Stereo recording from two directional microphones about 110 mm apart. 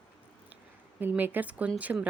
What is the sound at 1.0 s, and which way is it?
A woman's voice, 15° right (ahead or behind).